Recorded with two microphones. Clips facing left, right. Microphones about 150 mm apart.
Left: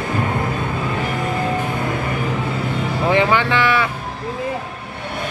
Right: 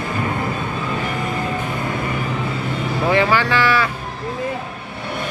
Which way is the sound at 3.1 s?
20° left (ahead or behind).